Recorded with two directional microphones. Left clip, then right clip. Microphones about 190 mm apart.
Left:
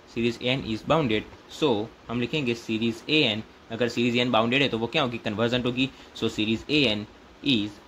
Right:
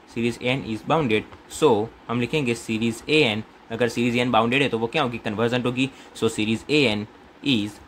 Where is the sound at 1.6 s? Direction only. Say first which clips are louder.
Right 6 dB; 20° right (ahead or behind).